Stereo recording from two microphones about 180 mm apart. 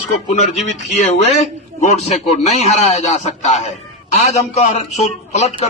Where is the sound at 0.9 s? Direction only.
40° left (ahead or behind).